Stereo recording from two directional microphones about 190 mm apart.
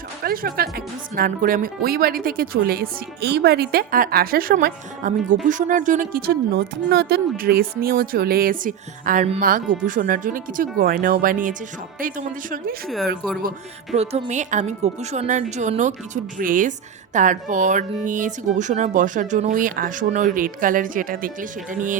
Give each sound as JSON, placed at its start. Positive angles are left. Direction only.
{"t": 0.3, "sound": "speech", "side_deg": -50}
{"t": 13.9, "sound": "a woman's voice", "side_deg": -35}